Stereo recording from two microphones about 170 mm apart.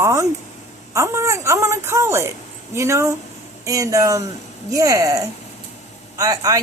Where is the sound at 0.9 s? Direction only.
15° right (ahead or behind).